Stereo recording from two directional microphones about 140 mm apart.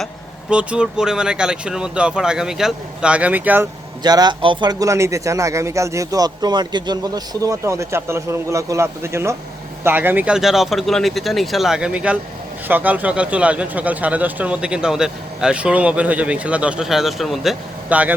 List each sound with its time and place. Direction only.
0.5 s speech: 5° right (ahead or behind)
4.0 s speech: 30° right (ahead or behind); by 18.1 s 10° right (ahead or behind)